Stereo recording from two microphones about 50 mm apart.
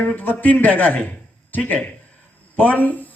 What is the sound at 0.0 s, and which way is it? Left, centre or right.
A man's voice, left.